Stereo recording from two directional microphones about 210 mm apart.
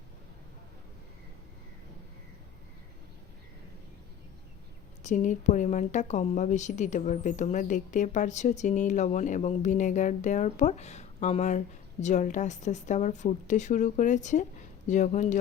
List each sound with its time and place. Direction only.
5.0 s a woman's voice: 35° left (ahead or behind)